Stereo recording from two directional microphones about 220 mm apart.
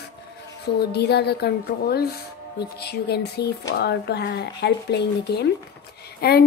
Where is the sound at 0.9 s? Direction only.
50° left (ahead or behind).